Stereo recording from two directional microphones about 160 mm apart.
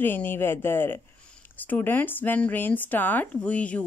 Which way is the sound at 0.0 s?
15° left (ahead or behind).